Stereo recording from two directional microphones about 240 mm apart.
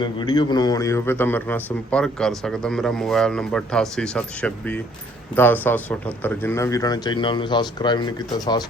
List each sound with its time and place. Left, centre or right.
0.0 s a man's voice: centre